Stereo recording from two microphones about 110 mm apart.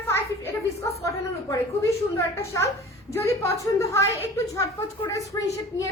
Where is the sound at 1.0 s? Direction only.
30° left (ahead or behind).